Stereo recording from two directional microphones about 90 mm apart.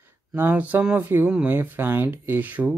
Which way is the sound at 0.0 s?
20° right (ahead or behind).